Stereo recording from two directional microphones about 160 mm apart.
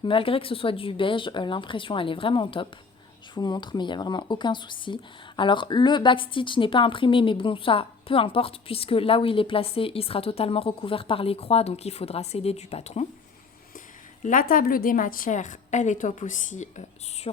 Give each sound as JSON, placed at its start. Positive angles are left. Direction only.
{"t": 0.0, "sound": "speech", "side_deg": 35}
{"t": 14.2, "sound": "a woman's voice", "side_deg": 55}